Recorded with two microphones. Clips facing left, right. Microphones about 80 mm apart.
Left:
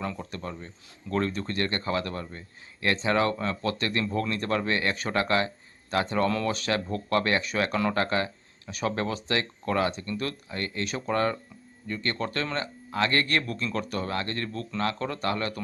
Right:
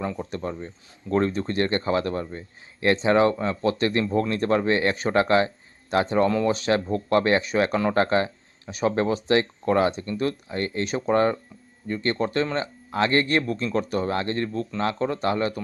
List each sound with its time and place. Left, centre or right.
0.0 s speech: right
6.2 s speech: centre